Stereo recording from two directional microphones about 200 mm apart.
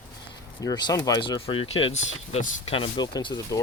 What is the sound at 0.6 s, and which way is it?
Speech, 20° left (ahead or behind).